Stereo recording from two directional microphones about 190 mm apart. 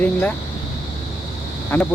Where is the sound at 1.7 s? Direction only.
10° left (ahead or behind).